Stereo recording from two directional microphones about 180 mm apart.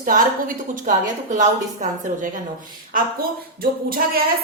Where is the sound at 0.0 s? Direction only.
50° right (ahead or behind).